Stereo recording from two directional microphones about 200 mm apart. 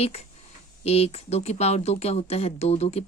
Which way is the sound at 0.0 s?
30° left (ahead or behind).